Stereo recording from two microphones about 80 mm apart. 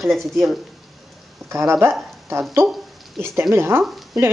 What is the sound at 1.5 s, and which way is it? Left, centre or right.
Speech, right.